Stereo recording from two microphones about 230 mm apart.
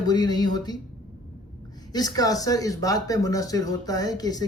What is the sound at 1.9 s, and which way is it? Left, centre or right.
Speech, centre.